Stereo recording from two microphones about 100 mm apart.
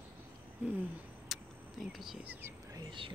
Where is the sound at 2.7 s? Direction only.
55° right (ahead or behind).